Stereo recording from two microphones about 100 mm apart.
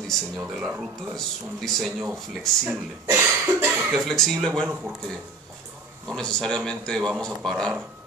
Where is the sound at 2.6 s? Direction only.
25° right (ahead or behind).